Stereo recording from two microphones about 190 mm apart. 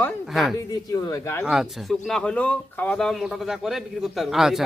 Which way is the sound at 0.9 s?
15° left (ahead or behind).